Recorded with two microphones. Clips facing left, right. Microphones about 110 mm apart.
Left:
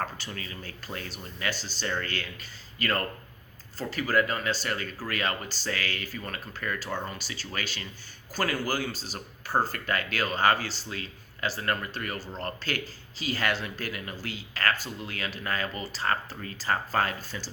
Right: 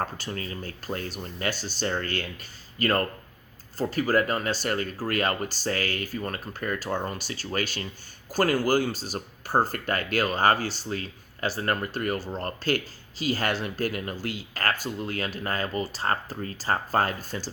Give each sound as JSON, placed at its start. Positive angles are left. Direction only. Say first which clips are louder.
{"t": 0.0, "sound": "speech", "louder": "right 3 dB", "side_deg": -35}